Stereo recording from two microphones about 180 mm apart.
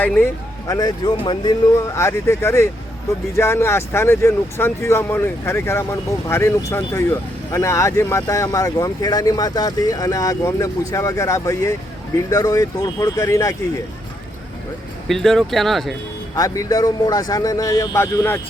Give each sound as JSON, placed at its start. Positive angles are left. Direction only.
{"t": 0.7, "sound": "speech", "side_deg": 20}
{"t": 15.0, "sound": "speech", "side_deg": 0}
{"t": 16.3, "sound": "speech", "side_deg": 20}